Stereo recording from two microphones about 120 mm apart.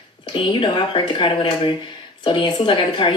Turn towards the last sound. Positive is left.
turn(degrees=45)  # may be behind; listen again after turning